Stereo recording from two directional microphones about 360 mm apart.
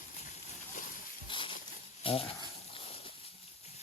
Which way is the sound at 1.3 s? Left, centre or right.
Centre.